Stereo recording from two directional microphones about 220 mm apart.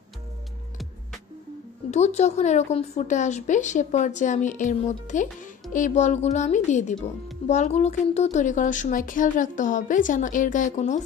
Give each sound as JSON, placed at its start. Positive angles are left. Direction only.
{"t": 1.9, "sound": "speech", "side_deg": 30}